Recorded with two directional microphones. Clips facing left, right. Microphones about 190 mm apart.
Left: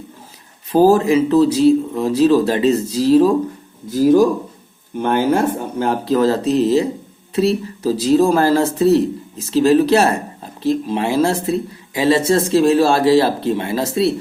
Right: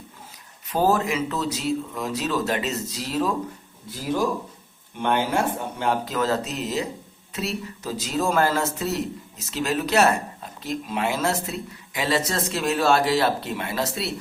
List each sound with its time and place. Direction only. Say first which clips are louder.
0.7 s speech: left 10 dB; 30° left (ahead or behind)